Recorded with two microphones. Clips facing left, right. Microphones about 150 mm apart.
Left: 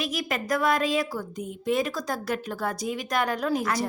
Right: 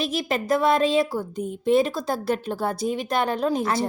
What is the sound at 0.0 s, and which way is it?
Speech, 30° right (ahead or behind).